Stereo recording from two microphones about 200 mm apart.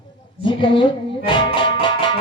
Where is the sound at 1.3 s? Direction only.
25° left (ahead or behind).